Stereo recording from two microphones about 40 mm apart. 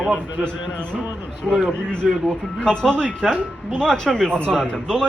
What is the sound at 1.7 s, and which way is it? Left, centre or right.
A man's voice, centre.